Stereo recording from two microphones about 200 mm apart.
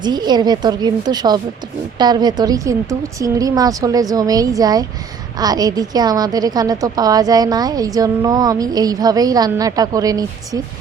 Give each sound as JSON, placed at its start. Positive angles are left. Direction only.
{"t": 0.0, "sound": "a woman's voice", "side_deg": -20}